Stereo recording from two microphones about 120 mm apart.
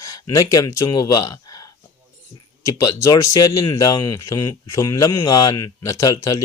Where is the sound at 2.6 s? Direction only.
30° left (ahead or behind).